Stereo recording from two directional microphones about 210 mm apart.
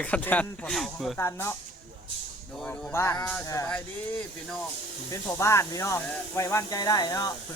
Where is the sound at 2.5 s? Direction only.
5° left (ahead or behind).